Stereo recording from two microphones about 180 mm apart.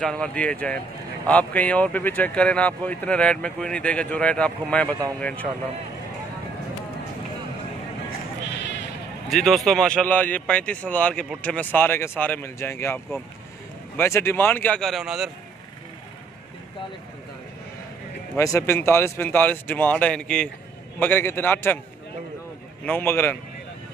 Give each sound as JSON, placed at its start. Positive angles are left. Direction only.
{"t": 0.0, "sound": "speech", "side_deg": 5}
{"t": 8.5, "sound": "bleat", "side_deg": 75}
{"t": 9.3, "sound": "speech", "side_deg": 0}
{"t": 18.3, "sound": "speech", "side_deg": 15}
{"t": 22.8, "sound": "speech", "side_deg": 10}